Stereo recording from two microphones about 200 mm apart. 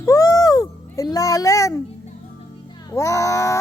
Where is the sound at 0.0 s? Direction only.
15° left (ahead or behind).